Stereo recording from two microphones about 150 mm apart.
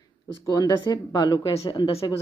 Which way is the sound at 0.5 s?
25° left (ahead or behind).